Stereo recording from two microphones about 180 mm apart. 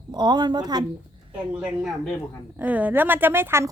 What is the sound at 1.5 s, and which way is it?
A woman's voice, centre (ahead or behind).